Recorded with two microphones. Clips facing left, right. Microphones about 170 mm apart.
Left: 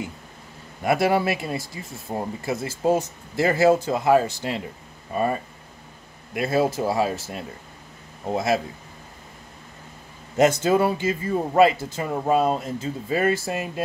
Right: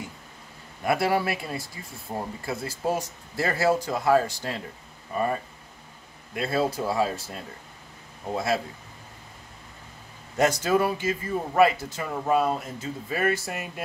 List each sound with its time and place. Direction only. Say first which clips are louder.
0.8 s speech: left 4 dB; 20° left (ahead or behind)
8.3 s speech: left 4 dB; 20° left (ahead or behind)
10.6 s speech: left 3 dB; 25° left (ahead or behind)